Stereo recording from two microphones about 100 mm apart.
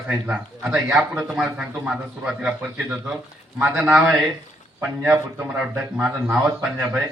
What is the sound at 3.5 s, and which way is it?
Speech, 20° right (ahead or behind).